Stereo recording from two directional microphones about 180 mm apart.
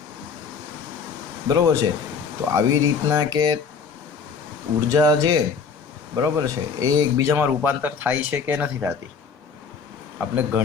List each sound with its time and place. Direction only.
1.5 s speech: 20° right (ahead or behind)
4.9 s speech: 20° right (ahead or behind)
10.2 s speech: 10° right (ahead or behind)